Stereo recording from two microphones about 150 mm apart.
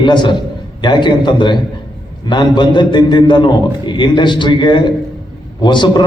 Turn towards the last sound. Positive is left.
turn(degrees=30)  # may be behind; listen again after turning